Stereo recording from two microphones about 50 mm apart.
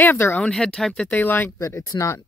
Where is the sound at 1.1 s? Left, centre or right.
Left.